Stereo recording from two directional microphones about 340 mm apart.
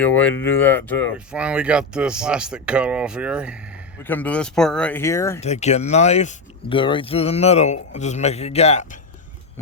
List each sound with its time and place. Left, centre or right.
0.0 s speech: centre
5.4 s speech: centre